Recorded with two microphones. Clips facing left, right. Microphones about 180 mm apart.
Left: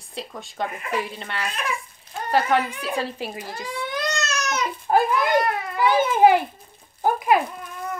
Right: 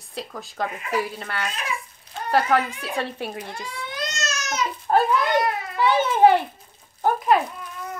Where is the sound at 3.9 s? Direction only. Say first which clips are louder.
Left 3 dB; 60° left (ahead or behind).